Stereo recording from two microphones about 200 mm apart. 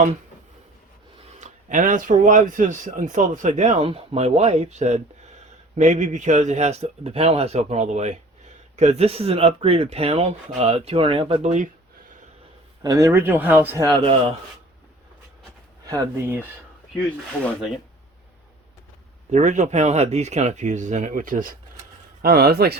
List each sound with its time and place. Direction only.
1.4 s speech: 40° right (ahead or behind)
12.8 s speech: 15° right (ahead or behind)
15.9 s speech: 15° right (ahead or behind)
19.3 s speech: 35° right (ahead or behind); by 22.8 s 50° right (ahead or behind)